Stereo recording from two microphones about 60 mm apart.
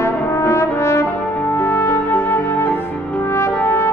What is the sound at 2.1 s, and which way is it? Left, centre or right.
Music, left.